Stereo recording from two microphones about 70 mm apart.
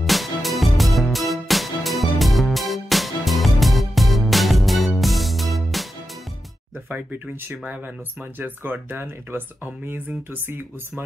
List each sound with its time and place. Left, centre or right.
0.0 s music: centre
7.4 s speech: right